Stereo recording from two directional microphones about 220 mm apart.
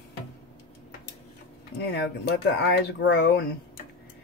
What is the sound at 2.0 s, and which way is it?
Speech, 50° left (ahead or behind).